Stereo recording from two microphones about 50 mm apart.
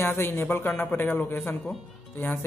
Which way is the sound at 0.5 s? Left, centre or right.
Left.